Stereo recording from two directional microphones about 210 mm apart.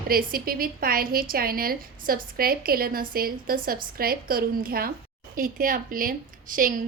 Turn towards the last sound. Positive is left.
turn(degrees=-40)  # may be behind; listen again after turning